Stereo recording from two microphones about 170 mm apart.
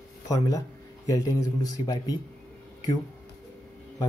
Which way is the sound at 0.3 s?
20° left (ahead or behind).